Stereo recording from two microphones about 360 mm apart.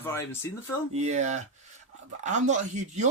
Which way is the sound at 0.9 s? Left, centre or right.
Centre.